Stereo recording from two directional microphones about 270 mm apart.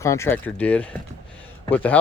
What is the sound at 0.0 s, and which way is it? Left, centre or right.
Speech, centre.